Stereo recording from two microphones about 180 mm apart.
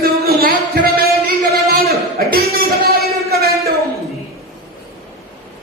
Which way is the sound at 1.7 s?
60° right (ahead or behind).